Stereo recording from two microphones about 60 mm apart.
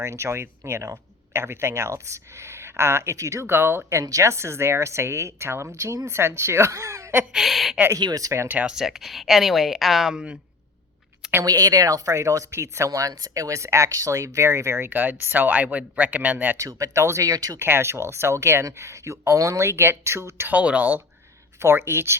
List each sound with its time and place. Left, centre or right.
0.0 s speech: right
3.4 s speech: right
3.9 s a woman's voice: right
7.3 s a woman's voice: centre
7.9 s speech: right
8.6 s speech: centre
11.4 s speech: right
14.8 s speech: right
16.6 s speech: right
17.0 s speech: right
17.2 s speech: right
17.6 s speech: right
20.5 s speech: right
21.6 s speech: right